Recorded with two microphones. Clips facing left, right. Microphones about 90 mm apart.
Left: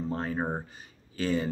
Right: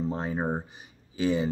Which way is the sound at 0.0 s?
15° right (ahead or behind).